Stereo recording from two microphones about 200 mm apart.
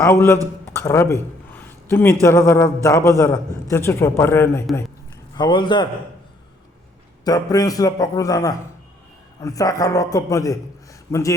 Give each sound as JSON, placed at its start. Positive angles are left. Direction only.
{"t": 0.0, "sound": "a man's voice", "side_deg": 15}
{"t": 0.7, "sound": "a sound", "side_deg": 15}
{"t": 2.2, "sound": "a man's voice", "side_deg": 15}
{"t": 7.3, "sound": "a man's voice", "side_deg": 20}